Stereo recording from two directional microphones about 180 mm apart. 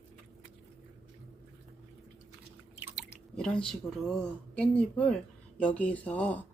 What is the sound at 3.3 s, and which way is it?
Speech, 5° left (ahead or behind).